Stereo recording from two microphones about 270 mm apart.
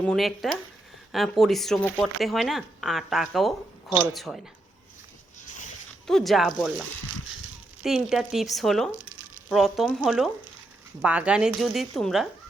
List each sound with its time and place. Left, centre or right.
0.0 s speech: centre
6.1 s speech: centre
7.9 s speech: centre
9.0 s a sound: right
9.5 s speech: centre